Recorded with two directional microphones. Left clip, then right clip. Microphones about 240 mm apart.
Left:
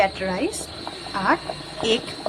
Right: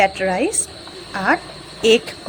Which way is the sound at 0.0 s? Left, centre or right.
Centre.